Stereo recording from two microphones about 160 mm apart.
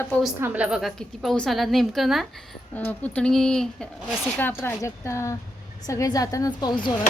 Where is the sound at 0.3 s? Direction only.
10° right (ahead or behind).